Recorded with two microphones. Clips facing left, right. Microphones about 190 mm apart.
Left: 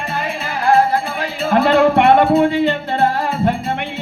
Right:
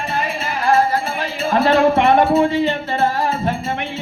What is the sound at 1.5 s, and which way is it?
Music, 60° left (ahead or behind).